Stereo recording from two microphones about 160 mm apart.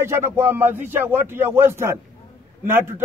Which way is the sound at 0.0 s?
15° right (ahead or behind).